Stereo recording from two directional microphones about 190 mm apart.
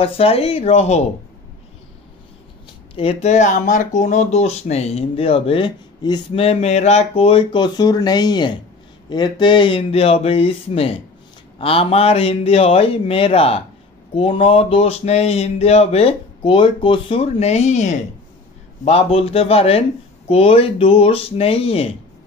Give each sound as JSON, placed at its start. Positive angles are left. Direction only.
{"t": 0.0, "sound": "speech", "side_deg": 30}
{"t": 3.0, "sound": "speech", "side_deg": 30}